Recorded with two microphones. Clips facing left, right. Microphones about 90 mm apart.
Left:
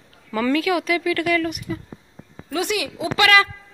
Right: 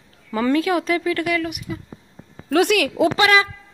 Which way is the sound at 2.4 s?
60° right (ahead or behind).